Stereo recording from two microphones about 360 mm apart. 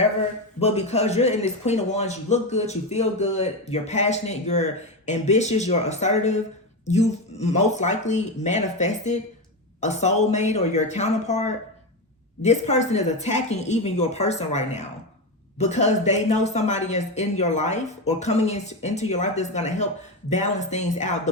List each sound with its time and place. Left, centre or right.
0.6 s a man's voice: centre